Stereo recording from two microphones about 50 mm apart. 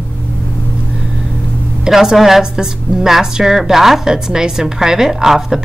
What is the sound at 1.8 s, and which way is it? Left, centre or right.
A woman's voice, centre.